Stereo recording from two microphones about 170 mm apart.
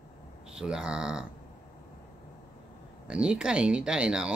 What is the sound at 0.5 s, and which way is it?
Speech, 5° right (ahead or behind).